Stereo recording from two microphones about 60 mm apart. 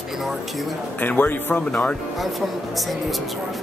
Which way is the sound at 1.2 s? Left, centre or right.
Left.